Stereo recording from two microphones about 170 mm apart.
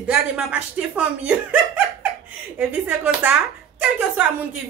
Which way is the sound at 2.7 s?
10° right (ahead or behind).